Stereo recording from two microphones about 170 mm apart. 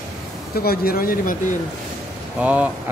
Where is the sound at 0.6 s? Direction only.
60° left (ahead or behind).